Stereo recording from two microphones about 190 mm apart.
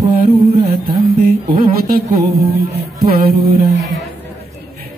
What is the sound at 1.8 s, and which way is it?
Music, 50° right (ahead or behind).